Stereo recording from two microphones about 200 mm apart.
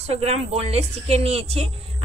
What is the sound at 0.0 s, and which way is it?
Speech, 30° right (ahead or behind).